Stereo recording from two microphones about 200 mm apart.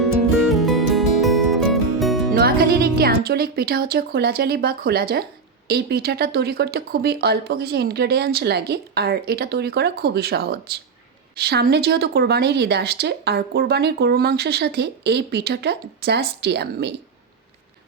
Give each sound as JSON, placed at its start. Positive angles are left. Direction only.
{"t": 0.4, "sound": "music", "side_deg": 0}
{"t": 2.3, "sound": "speech", "side_deg": -50}